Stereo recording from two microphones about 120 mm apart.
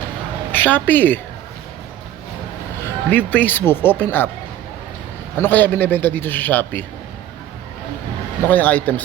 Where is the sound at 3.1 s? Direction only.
15° left (ahead or behind).